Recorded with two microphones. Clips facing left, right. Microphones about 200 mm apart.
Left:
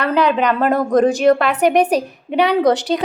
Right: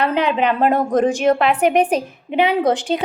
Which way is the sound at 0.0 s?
40° left (ahead or behind).